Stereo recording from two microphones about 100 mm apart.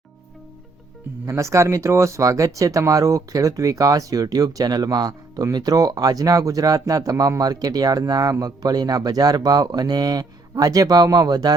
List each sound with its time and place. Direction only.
1.3 s speech: 30° right (ahead or behind)